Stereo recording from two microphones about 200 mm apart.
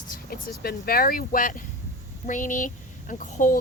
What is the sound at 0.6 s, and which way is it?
Speech, 50° left (ahead or behind).